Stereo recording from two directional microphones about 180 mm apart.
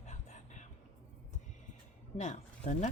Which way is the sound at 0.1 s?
40° left (ahead or behind).